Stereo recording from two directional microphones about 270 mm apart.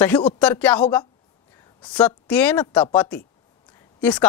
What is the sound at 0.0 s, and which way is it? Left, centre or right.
Speech, centre.